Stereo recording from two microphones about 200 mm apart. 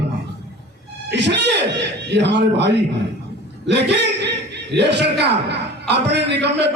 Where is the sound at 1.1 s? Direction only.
60° right (ahead or behind).